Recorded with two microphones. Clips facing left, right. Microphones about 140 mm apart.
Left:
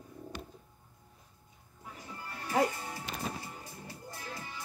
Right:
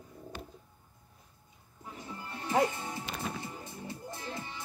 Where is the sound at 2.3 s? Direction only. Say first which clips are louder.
Right 1 dB; 25° right (ahead or behind).